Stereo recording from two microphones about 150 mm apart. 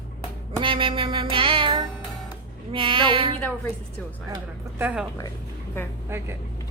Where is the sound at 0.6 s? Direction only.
35° right (ahead or behind).